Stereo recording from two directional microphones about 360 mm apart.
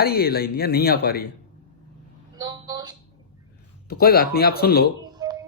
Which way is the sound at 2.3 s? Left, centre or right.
Centre.